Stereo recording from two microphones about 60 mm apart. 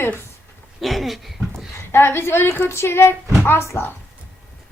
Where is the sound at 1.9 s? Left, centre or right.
Left.